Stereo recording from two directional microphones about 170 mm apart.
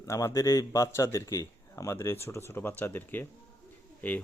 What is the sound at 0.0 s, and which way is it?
Speech, 20° left (ahead or behind).